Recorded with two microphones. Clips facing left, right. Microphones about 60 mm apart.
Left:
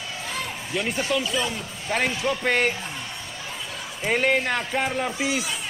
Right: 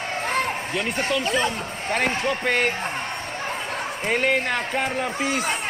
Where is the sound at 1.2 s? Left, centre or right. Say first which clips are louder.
Right 4 dB; right.